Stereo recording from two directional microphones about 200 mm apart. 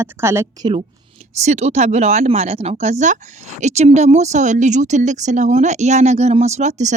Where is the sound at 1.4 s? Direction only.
35° right (ahead or behind).